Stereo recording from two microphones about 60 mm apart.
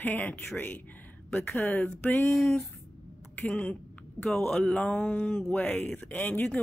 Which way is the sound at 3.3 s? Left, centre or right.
Left.